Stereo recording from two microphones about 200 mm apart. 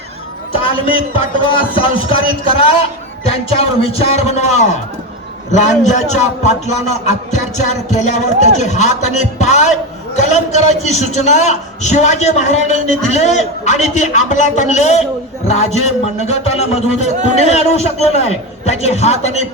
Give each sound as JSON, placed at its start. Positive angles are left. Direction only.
{"t": 0.6, "sound": "a man's voice", "side_deg": 25}
{"t": 17.2, "sound": "speech", "side_deg": -35}
{"t": 17.5, "sound": "a man's voice", "side_deg": 30}